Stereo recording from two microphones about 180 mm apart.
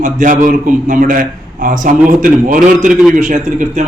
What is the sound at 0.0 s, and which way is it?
A man's voice, 45° right (ahead or behind).